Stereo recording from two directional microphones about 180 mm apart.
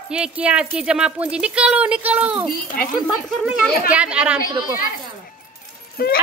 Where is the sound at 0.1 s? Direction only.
5° right (ahead or behind).